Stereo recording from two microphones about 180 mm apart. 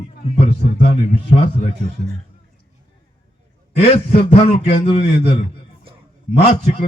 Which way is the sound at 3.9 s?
35° left (ahead or behind).